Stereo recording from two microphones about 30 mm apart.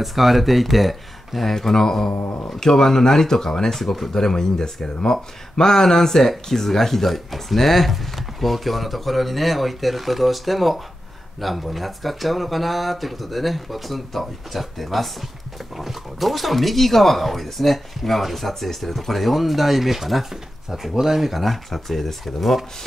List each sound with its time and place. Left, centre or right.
0.0 s speech: centre
1.5 s speech: centre
3.7 s speech: centre
4.1 s speech: centre